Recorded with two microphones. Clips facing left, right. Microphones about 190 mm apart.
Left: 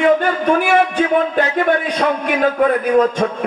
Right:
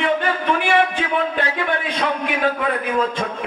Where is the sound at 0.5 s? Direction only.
45° left (ahead or behind).